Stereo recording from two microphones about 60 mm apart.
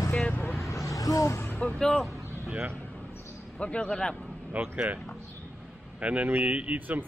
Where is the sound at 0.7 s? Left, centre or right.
Left.